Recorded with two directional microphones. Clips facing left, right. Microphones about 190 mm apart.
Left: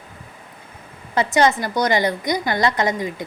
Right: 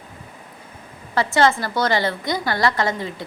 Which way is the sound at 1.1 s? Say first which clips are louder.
Left 1 dB; 20° left (ahead or behind).